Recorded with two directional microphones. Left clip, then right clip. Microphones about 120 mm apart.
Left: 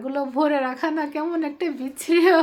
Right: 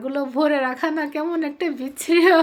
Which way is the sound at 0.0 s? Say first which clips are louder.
Right 1 dB; 25° right (ahead or behind).